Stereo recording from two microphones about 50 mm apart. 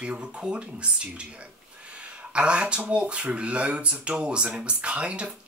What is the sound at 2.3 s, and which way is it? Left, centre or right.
Speech, right.